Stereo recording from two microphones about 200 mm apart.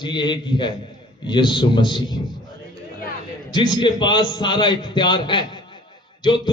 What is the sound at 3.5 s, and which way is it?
A man's voice, 20° left (ahead or behind).